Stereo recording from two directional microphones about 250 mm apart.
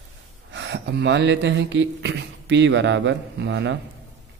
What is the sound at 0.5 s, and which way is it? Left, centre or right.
Speech, right.